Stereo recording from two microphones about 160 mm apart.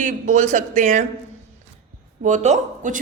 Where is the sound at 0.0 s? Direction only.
45° right (ahead or behind).